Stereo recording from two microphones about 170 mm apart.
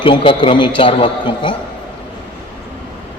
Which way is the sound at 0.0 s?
30° left (ahead or behind).